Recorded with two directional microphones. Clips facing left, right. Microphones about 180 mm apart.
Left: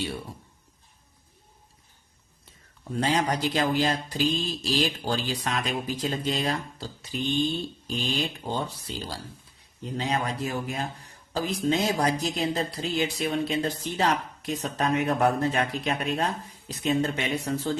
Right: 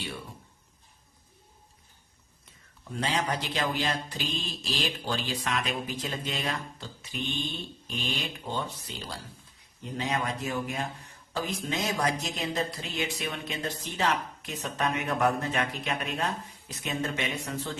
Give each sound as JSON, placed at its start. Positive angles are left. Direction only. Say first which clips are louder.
{"t": 2.9, "sound": "speech", "louder": "left 5 dB", "side_deg": 40}